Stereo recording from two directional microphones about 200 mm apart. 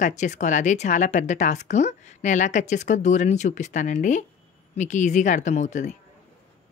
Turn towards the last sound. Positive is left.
turn(degrees=35)  # may be behind; listen again after turning